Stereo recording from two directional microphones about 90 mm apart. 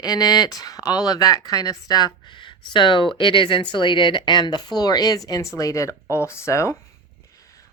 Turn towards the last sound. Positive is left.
turn(degrees=30)  # may be behind; listen again after turning